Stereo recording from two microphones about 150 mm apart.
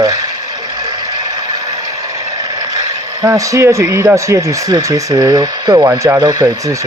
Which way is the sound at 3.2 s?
20° right (ahead or behind).